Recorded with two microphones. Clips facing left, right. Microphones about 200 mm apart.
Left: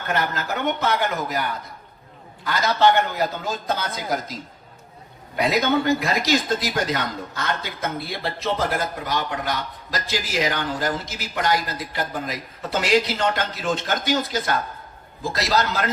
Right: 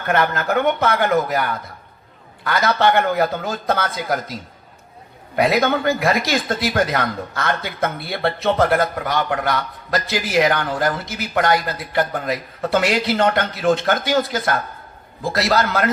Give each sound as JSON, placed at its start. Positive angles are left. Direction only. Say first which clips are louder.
{"t": 0.1, "sound": "speech", "louder": "right 7 dB", "side_deg": -60}
{"t": 5.4, "sound": "speech", "louder": "right 3 dB", "side_deg": -60}
{"t": 15.2, "sound": "speech", "louder": "right 4 dB", "side_deg": -60}